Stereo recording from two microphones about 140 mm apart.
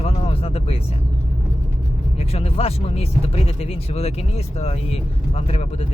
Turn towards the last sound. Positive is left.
turn(degrees=50)  # may be behind; listen again after turning